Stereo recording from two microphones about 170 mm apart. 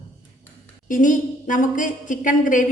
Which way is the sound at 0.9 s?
50° left (ahead or behind).